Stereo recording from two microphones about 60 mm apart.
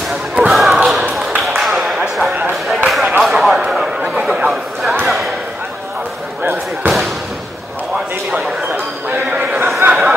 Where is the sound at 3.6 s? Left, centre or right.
Centre.